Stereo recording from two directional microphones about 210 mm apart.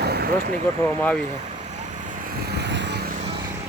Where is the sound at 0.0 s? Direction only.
50° right (ahead or behind).